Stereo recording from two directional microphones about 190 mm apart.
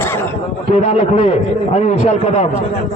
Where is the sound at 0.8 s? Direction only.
35° left (ahead or behind).